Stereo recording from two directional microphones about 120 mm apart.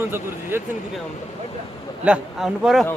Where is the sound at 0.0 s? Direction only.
20° right (ahead or behind).